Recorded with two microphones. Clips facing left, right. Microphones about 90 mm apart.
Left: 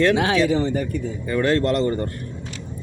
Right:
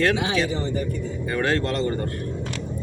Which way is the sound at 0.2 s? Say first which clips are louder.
Left 5 dB; 75° left (ahead or behind).